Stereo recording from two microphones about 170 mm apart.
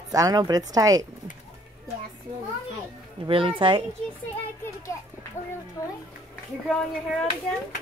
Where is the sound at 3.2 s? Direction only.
30° right (ahead or behind).